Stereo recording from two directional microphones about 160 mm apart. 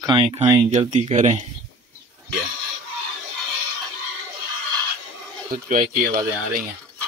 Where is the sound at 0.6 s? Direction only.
50° right (ahead or behind).